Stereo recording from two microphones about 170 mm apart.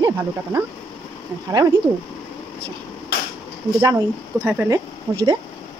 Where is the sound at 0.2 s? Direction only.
15° right (ahead or behind).